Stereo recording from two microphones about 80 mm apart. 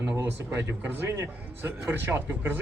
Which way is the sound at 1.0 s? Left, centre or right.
Right.